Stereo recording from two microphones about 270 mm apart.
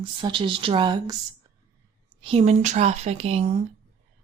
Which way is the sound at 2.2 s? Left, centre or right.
Right.